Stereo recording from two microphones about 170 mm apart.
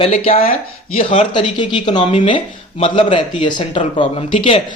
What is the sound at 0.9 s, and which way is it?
Speech, 45° left (ahead or behind).